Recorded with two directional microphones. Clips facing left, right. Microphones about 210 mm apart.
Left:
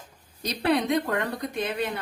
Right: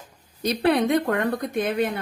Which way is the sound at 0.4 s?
55° right (ahead or behind).